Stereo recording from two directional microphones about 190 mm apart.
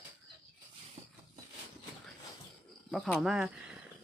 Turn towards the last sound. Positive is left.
turn(degrees=-5)  # may be behind; listen again after turning